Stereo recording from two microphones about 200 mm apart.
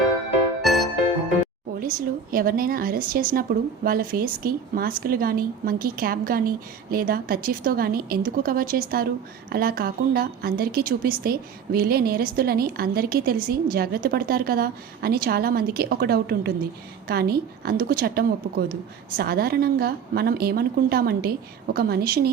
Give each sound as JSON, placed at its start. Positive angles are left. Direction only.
{"t": 0.6, "sound": "music", "side_deg": 0}
{"t": 1.8, "sound": "a woman's voice", "side_deg": -45}